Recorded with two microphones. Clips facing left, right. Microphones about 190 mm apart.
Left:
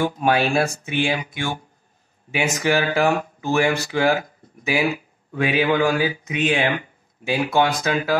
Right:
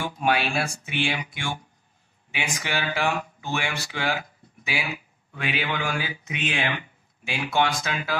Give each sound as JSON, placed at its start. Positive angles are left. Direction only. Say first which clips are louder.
{"t": 0.0, "sound": "speech", "louder": "left 5 dB", "side_deg": 45}